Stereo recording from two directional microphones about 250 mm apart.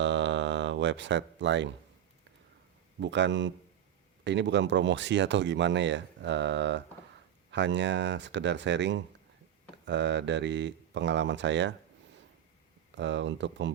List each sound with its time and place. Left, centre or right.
0.0 s a sound: right
3.0 s speech: right
13.0 s speech: right